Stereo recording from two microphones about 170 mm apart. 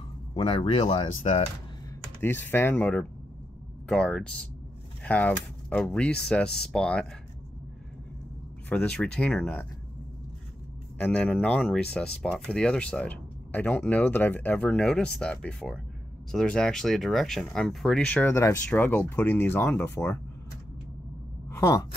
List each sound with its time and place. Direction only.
0.3 s speech: 35° left (ahead or behind)
2.2 s speech: 10° left (ahead or behind)
8.6 s speech: 5° left (ahead or behind)
11.0 s speech: 10° left (ahead or behind)
21.5 s speech: 20° left (ahead or behind)